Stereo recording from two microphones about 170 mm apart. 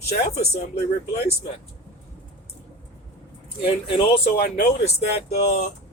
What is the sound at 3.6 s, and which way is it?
Speech, 30° left (ahead or behind).